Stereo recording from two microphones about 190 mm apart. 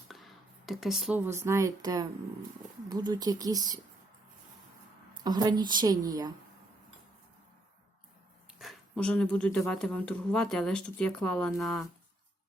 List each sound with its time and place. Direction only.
0.1 s a woman's voice: centre (ahead or behind); by 3.8 s 20° right (ahead or behind)
5.2 s a woman's voice: 20° right (ahead or behind)
8.5 s speech: centre (ahead or behind)